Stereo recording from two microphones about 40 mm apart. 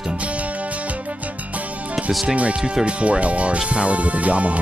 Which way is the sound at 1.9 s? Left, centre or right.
Centre.